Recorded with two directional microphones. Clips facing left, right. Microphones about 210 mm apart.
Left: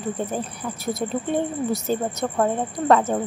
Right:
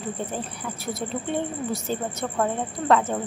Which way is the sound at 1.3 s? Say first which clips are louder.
Left 4 dB; 40° left (ahead or behind).